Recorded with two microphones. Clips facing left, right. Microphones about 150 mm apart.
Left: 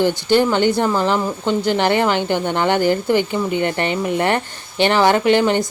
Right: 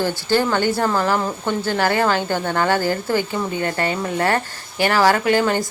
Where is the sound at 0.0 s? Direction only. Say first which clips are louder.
Left 4 dB; 20° left (ahead or behind).